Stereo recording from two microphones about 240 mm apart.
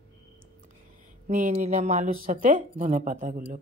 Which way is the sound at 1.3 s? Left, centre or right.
Right.